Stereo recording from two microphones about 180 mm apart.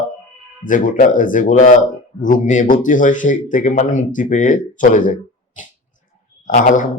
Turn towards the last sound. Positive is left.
turn(degrees=45)  # may be behind; listen again after turning